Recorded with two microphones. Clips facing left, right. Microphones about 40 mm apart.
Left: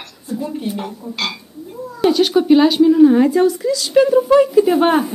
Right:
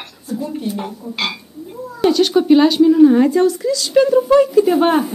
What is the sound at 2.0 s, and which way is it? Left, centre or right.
Speech, centre.